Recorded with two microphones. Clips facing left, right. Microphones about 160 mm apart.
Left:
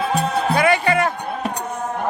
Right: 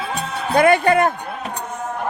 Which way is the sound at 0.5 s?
50° right (ahead or behind).